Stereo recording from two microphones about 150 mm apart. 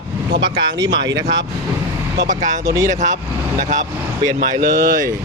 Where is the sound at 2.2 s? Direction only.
55° right (ahead or behind).